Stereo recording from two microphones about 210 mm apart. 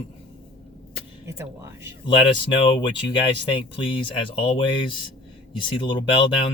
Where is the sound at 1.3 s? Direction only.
15° right (ahead or behind).